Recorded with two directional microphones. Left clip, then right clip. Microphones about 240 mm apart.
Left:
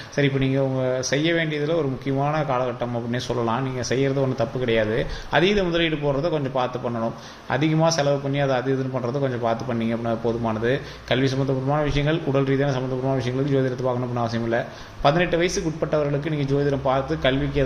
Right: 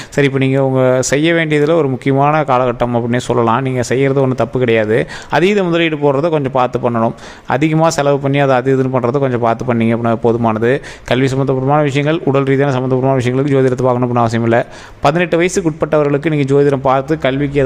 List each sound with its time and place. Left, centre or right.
0.2 s speech: right